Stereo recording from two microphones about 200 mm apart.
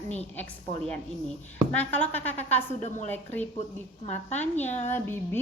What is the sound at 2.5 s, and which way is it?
A woman's voice, 35° left (ahead or behind).